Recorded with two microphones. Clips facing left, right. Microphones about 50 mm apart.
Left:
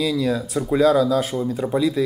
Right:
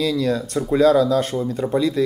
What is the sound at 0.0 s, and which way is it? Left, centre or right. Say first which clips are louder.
Speech: right 1 dB; centre.